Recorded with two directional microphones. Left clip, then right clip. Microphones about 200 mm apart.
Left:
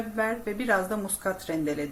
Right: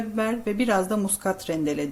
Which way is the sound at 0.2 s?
45° right (ahead or behind).